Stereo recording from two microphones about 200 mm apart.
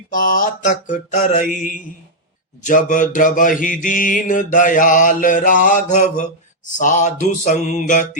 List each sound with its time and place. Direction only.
0.1 s mantra: 40° left (ahead or behind)